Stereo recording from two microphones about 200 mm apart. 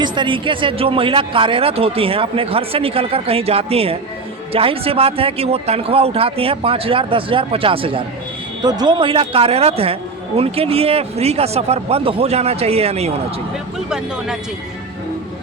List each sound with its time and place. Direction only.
0.0 s speech: 25° right (ahead or behind)